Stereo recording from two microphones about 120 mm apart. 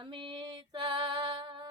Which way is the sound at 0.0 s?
45° right (ahead or behind).